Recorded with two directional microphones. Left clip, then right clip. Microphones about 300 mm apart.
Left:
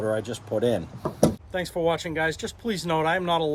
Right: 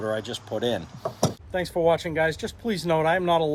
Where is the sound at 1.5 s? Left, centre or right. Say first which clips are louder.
Right 5 dB; centre.